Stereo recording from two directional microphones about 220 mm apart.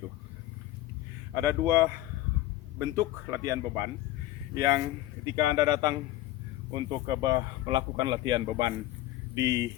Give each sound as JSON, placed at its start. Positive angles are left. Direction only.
{"t": 1.4, "sound": "a man's voice", "side_deg": -15}
{"t": 7.1, "sound": "a man's voice", "side_deg": -20}